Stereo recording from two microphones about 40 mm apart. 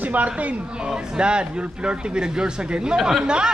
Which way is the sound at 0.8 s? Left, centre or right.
Right.